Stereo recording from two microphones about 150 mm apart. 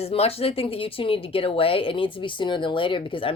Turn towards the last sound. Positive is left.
turn(degrees=35)  # may be behind; listen again after turning